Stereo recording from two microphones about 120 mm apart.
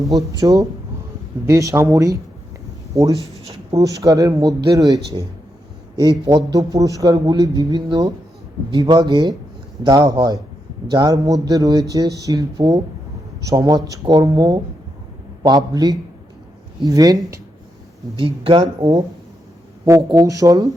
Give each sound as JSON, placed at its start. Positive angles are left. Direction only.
{"t": 0.3, "sound": "a man's voice", "side_deg": -30}
{"t": 18.2, "sound": "a man's voice", "side_deg": -45}